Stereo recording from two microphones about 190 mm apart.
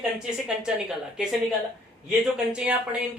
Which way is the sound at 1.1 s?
5° right (ahead or behind).